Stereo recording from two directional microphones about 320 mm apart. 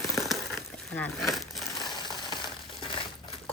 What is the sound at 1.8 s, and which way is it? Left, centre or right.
Crushing, centre.